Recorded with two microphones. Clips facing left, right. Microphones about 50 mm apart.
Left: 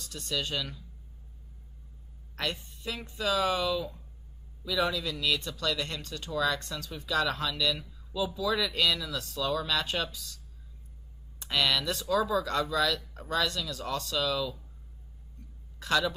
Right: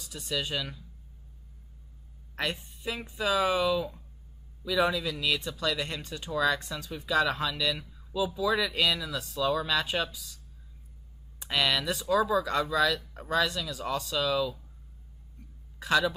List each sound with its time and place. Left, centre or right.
0.0 s speech: centre
2.3 s speech: centre
15.8 s a man's voice: centre